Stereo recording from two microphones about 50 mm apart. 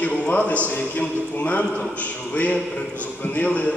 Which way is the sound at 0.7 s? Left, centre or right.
Left.